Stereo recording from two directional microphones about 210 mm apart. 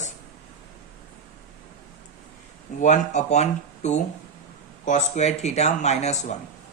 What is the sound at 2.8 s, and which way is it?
A man's voice, 35° left (ahead or behind).